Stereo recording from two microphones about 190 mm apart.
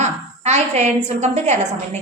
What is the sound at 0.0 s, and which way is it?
A woman's voice, 35° right (ahead or behind).